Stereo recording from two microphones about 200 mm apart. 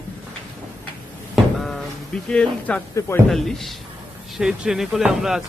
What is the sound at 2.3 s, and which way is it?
Speech, 5° left (ahead or behind).